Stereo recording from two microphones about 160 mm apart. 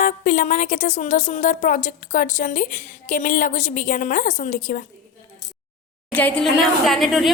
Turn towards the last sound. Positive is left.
turn(degrees=0)  # may be behind; listen again after turning